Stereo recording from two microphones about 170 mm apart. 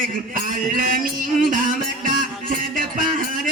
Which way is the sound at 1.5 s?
55° right (ahead or behind).